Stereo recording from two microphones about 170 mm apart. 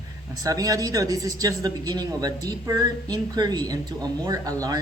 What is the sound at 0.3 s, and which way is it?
Speech, 20° right (ahead or behind).